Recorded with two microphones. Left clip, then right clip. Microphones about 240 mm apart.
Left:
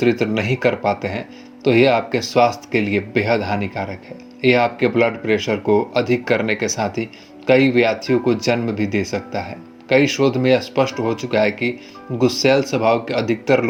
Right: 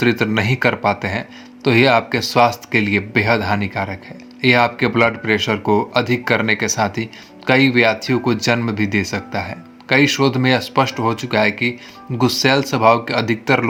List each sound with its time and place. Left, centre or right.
0.0 s speech: right